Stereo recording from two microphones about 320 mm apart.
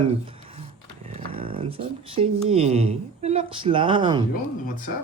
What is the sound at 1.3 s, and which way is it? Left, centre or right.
Speech, centre.